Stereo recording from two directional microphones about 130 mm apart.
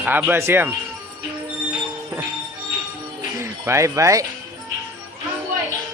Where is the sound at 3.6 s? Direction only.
20° right (ahead or behind).